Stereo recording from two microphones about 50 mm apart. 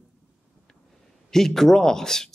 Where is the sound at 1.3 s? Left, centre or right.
Centre.